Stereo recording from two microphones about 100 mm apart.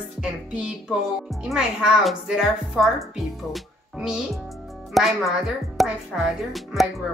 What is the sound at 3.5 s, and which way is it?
Music, centre (ahead or behind).